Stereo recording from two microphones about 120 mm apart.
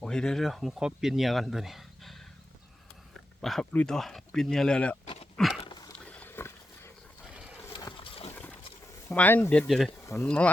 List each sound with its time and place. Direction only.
0.0 s speech: 5° left (ahead or behind)
3.4 s speech: centre (ahead or behind)
5.4 s dog: 5° left (ahead or behind)
6.1 s wild animals: 15° left (ahead or behind)
8.3 s a sound: 15° left (ahead or behind)
9.1 s speech: 15° left (ahead or behind)
9.6 s speech: centre (ahead or behind)